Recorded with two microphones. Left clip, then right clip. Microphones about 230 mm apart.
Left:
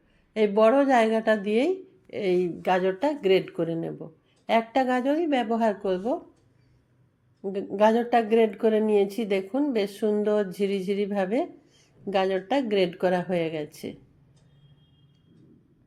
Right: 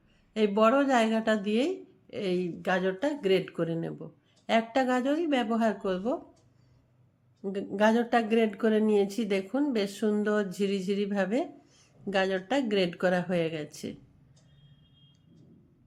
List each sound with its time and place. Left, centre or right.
0.3 s a woman's voice: centre
7.4 s a woman's voice: centre